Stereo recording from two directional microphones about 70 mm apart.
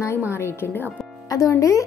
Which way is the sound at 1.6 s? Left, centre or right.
Left.